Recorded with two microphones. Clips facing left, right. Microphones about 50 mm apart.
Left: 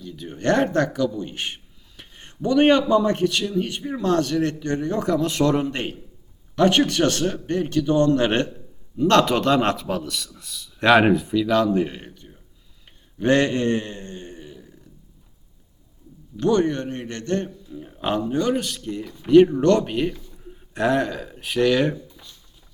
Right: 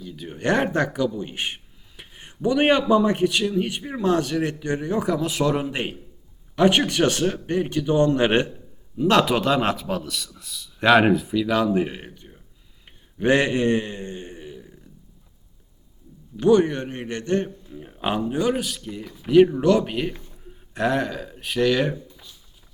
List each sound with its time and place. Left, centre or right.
0.0 s a man's voice: centre
16.4 s a man's voice: centre
20.3 s a sound: centre